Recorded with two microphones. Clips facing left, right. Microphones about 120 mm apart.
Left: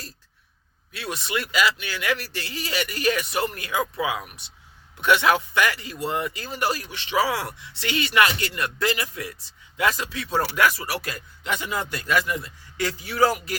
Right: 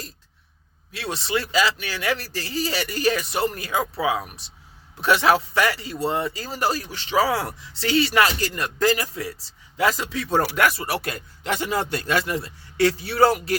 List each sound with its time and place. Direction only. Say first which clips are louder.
0.9 s a man's voice: right 3 dB; 30° right (ahead or behind)